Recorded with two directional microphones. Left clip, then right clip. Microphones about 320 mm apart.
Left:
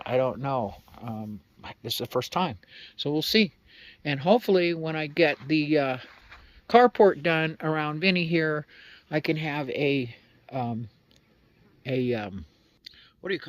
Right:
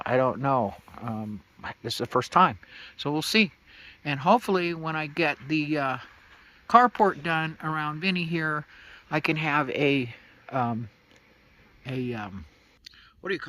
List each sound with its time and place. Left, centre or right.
0.0 s speech: centre
0.6 s speech: right
1.6 s speech: centre
11.8 s speech: centre
12.8 s whispering: centre